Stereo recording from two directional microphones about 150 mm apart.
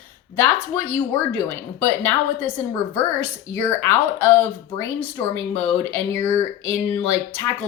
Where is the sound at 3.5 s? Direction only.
15° left (ahead or behind).